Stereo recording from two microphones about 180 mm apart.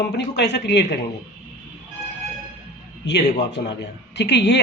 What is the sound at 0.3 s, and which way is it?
Speech, 70° left (ahead or behind).